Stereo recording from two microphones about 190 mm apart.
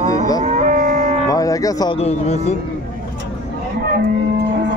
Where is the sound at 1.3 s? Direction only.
20° left (ahead or behind).